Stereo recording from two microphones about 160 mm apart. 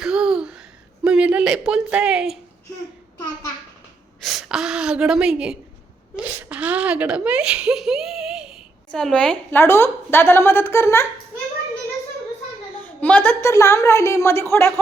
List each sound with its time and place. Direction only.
0.0 s a sound: 5° right (ahead or behind)
1.0 s speech: 5° right (ahead or behind)
4.2 s a woman's voice: centre (ahead or behind); by 11.0 s 15° left (ahead or behind)
12.8 s a woman's voice: 10° left (ahead or behind)